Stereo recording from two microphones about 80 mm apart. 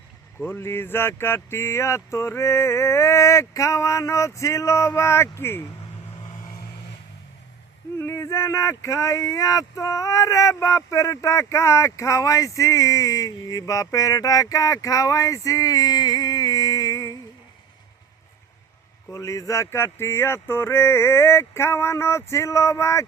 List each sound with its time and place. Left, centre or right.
0.3 s speech: left
7.9 s speech: left
19.1 s speech: left